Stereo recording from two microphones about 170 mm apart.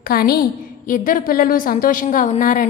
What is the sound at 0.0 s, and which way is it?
A woman's voice, 60° left (ahead or behind).